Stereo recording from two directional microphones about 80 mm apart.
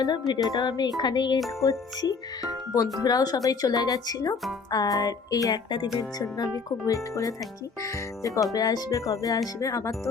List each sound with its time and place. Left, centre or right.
0.0 s speech: left
1.6 s speech: left
8.5 s speech: left